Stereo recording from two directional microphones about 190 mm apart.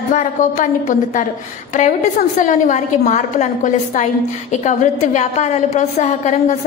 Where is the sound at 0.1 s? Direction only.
40° left (ahead or behind).